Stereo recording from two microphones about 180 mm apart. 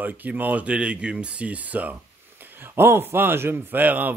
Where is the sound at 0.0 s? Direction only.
10° right (ahead or behind).